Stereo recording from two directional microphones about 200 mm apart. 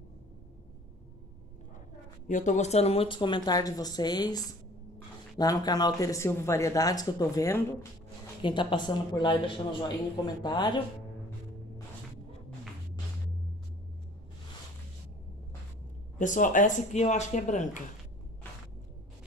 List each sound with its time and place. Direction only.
2.2 s speech: 40° left (ahead or behind); by 7.8 s 15° left (ahead or behind)
8.4 s speech: 25° left (ahead or behind)
16.2 s speech: 40° left (ahead or behind)